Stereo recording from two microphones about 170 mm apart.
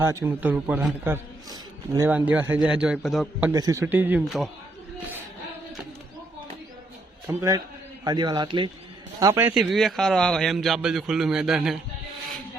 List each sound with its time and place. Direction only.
0.0 s a man's voice: 15° right (ahead or behind)
1.0 s a man's voice: 15° right (ahead or behind); by 3.5 s centre (ahead or behind)
3.5 s a man's voice: 20° right (ahead or behind)
7.3 s a man's voice: 20° right (ahead or behind)
9.2 s a man's voice: 15° right (ahead or behind)
9.6 s a man's voice: centre (ahead or behind)